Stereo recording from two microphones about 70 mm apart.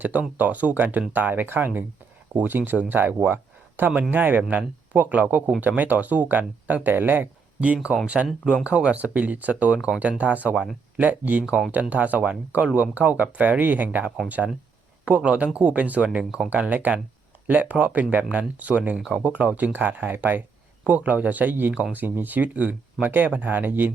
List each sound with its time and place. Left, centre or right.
0.0 s speech: right